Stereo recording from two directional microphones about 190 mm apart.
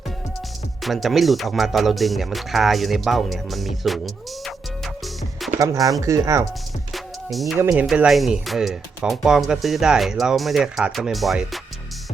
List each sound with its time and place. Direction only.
0.8 s speech: centre (ahead or behind)
5.5 s speech: 15° right (ahead or behind)
6.9 s music: centre (ahead or behind)
7.6 s speech: 10° right (ahead or behind)
7.9 s speech: centre (ahead or behind)